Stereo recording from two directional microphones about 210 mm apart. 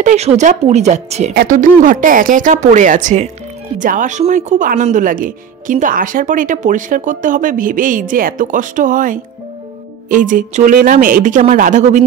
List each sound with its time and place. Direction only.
0.0 s speech: 30° right (ahead or behind)